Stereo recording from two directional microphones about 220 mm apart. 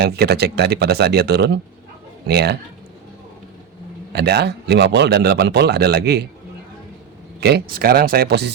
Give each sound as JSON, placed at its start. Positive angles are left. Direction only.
{"t": 0.0, "sound": "speech", "side_deg": -45}
{"t": 4.1, "sound": "speech", "side_deg": -50}
{"t": 7.3, "sound": "speech", "side_deg": -50}